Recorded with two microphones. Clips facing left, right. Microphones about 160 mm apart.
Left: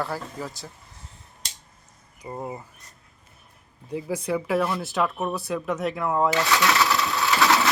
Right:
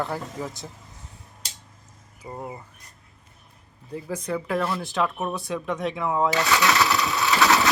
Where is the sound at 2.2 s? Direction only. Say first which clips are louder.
Left 2 dB; 10° left (ahead or behind).